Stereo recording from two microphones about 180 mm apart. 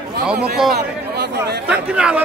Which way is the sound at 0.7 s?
65° right (ahead or behind).